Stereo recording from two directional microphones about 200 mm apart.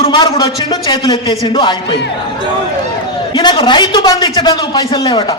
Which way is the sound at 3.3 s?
25° left (ahead or behind).